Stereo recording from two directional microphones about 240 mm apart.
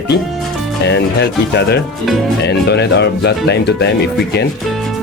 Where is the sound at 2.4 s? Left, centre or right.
Left.